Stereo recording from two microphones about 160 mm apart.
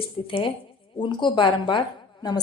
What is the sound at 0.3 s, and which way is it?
A woman's voice, 35° left (ahead or behind).